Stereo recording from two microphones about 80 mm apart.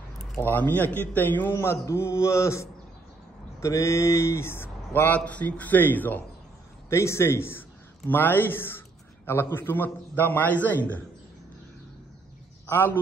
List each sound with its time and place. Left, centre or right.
0.4 s a man's voice: left
6.9 s a man's voice: left; by 11.0 s centre
12.6 s a man's voice: left